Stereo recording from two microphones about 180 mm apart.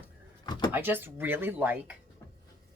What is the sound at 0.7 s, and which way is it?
Speech, 10° right (ahead or behind).